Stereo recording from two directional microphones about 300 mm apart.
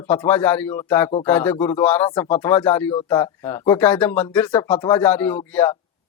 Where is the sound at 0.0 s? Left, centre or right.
Centre.